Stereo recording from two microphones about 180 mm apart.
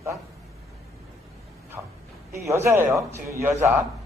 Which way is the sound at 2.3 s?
15° right (ahead or behind).